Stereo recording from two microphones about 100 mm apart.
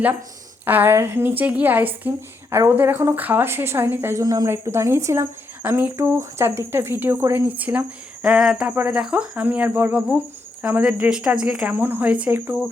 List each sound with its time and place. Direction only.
0.6 s speech: 20° right (ahead or behind)
4.2 s speech: 40° right (ahead or behind)
4.4 s speech: 25° right (ahead or behind)